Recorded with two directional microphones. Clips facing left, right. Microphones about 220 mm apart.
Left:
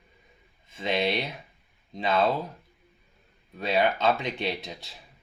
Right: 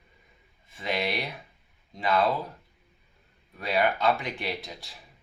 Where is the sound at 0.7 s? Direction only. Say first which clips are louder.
Left 3 dB; 20° left (ahead or behind).